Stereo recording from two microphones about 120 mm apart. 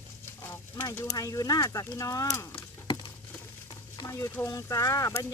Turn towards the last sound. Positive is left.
turn(degrees=30)  # may be behind; listen again after turning